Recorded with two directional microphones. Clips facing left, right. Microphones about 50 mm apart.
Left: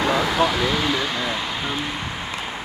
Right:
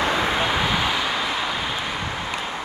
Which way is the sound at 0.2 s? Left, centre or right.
Right.